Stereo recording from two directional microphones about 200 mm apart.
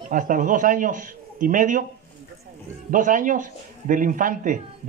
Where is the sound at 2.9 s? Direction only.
40° right (ahead or behind).